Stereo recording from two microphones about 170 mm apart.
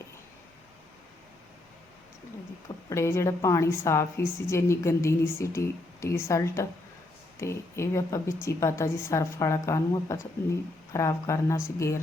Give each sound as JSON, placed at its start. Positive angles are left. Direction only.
{"t": 2.9, "sound": "a woman's voice", "side_deg": 15}